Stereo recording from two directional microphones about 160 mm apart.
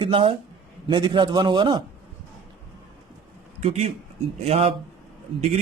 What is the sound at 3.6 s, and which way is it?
Speech, 45° right (ahead or behind).